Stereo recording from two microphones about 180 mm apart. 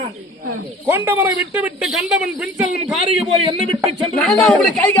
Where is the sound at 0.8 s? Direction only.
15° right (ahead or behind).